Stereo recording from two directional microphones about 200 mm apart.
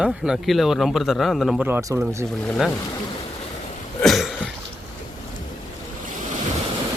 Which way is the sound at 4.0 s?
Centre (ahead or behind).